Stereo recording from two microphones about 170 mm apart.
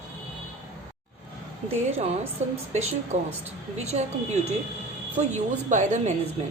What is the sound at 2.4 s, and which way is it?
A woman's voice, 40° right (ahead or behind).